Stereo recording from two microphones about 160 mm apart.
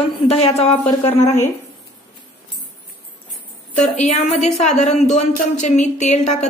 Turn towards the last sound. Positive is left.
turn(degrees=45)  # may be behind; listen again after turning